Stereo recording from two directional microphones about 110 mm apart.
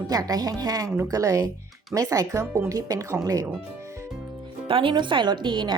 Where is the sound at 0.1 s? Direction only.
35° right (ahead or behind).